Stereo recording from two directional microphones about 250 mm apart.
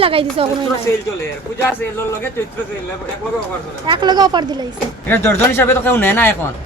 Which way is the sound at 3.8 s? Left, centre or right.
Centre.